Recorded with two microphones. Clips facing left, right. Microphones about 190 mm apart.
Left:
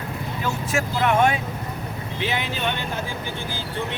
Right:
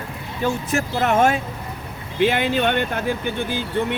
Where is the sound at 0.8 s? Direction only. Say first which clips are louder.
Right 1 dB; 40° right (ahead or behind).